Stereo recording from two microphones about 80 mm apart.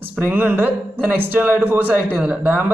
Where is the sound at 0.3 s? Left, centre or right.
Right.